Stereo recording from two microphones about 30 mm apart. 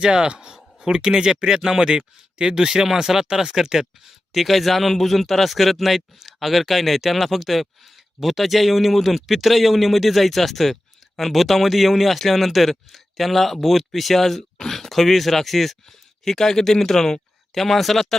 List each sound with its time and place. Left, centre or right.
0.0 s speech: right
4.3 s speech: centre
15.9 s speech: centre
17.5 s speech: centre